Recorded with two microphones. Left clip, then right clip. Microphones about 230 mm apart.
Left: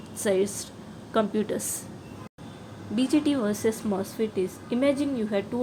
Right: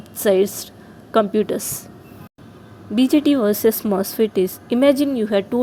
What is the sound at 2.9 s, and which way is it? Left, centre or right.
A woman's voice, right.